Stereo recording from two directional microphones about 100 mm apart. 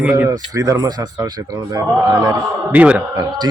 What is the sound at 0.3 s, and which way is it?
Speech, 35° right (ahead or behind).